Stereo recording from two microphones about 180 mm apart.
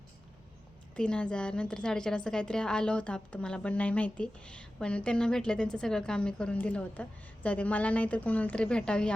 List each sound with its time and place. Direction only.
0.9 s a woman's voice: 5° left (ahead or behind)